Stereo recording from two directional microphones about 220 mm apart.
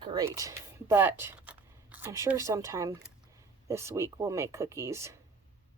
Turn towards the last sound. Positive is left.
turn(degrees=-10)  # may be behind; listen again after turning